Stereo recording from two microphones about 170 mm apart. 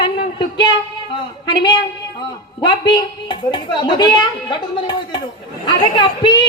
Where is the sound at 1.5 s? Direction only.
25° left (ahead or behind).